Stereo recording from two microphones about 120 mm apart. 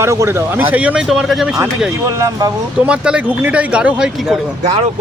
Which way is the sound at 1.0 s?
Centre (ahead or behind).